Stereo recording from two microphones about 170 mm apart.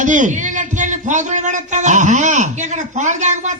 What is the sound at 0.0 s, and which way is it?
A man's voice, 45° right (ahead or behind).